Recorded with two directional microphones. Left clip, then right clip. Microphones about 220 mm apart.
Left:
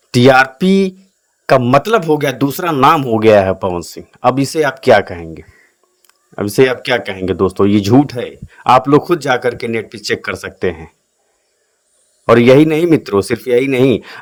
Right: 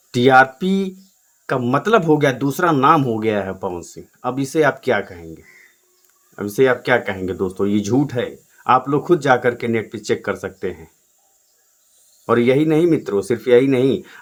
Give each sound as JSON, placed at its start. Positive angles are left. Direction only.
{"t": 0.1, "sound": "speech", "side_deg": 40}
{"t": 12.2, "sound": "speech", "side_deg": 35}